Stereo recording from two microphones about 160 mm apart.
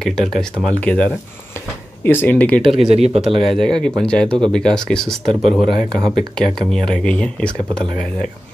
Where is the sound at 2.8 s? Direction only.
45° right (ahead or behind).